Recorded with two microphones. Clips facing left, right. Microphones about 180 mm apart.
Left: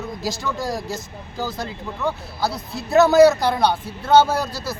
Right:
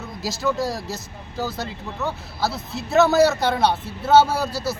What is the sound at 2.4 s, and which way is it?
Speech, centre (ahead or behind).